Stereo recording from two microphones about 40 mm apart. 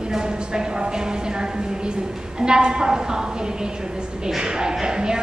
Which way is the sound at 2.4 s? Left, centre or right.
Right.